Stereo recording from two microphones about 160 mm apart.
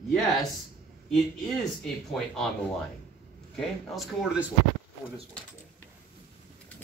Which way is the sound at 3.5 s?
Centre (ahead or behind).